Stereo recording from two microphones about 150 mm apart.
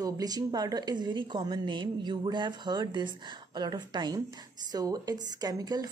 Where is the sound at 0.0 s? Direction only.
25° right (ahead or behind).